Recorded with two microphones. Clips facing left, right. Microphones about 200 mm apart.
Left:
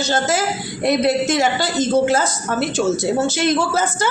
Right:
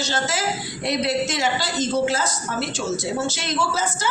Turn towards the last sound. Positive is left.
turn(degrees=55)  # may be behind; listen again after turning